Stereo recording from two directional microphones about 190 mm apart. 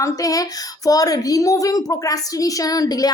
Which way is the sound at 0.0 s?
20° left (ahead or behind).